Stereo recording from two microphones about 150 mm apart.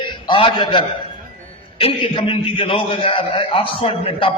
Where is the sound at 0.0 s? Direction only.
35° left (ahead or behind).